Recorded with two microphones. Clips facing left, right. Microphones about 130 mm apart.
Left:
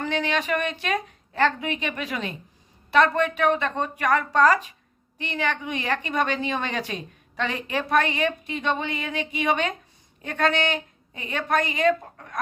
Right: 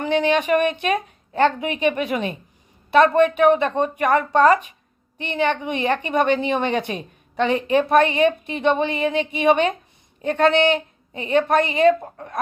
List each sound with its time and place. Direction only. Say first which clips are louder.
0.0 s a woman's voice: right 7 dB; 15° right (ahead or behind)